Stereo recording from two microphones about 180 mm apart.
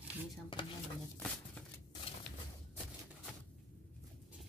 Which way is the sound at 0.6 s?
25° left (ahead or behind).